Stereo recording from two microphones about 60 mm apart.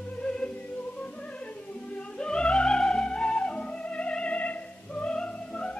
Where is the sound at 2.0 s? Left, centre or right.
Centre.